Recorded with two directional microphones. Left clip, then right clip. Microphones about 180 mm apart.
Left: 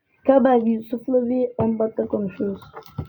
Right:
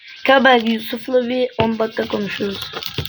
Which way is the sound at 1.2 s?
10° left (ahead or behind).